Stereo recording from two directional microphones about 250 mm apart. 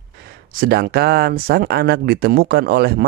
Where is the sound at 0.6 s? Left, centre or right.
Right.